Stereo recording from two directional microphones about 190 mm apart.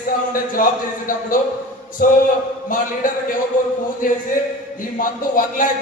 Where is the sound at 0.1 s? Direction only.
45° left (ahead or behind).